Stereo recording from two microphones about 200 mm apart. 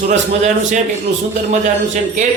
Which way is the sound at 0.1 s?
35° right (ahead or behind).